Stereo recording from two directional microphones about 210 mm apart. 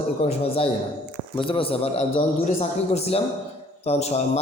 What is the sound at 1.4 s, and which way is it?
A man's voice, 25° left (ahead or behind).